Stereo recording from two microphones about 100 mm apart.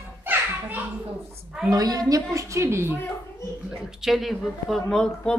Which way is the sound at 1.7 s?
40° right (ahead or behind).